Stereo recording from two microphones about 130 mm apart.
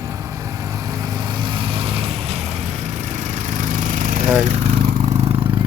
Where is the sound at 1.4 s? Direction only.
40° right (ahead or behind).